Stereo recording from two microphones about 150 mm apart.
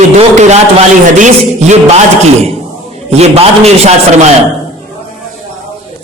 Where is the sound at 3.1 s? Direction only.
45° right (ahead or behind).